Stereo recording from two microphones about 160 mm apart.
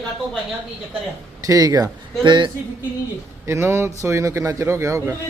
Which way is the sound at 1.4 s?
20° right (ahead or behind).